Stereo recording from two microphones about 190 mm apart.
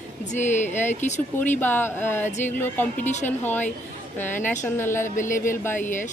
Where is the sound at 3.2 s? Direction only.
10° left (ahead or behind).